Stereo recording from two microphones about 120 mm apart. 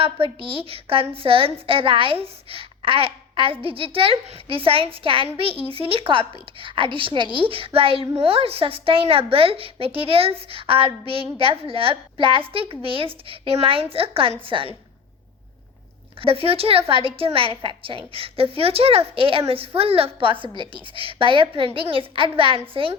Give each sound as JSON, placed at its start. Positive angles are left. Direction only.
{"t": 0.0, "sound": "a woman's voice", "side_deg": -50}
{"t": 16.2, "sound": "a woman's voice", "side_deg": -50}